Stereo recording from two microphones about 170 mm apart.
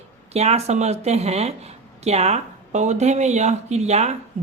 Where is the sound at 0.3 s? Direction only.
40° right (ahead or behind).